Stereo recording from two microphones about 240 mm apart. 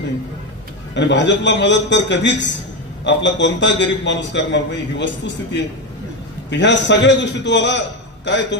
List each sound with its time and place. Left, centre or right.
0.9 s a man's voice: left